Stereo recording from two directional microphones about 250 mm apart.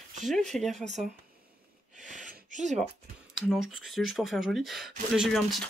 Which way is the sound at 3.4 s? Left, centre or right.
Centre.